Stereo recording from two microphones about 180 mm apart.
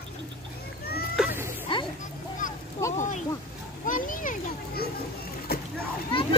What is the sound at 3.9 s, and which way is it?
Children playing, 50° left (ahead or behind).